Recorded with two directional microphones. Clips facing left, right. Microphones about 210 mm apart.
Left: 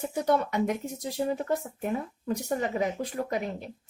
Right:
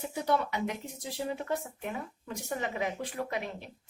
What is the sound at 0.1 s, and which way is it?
A woman's voice, 45° left (ahead or behind).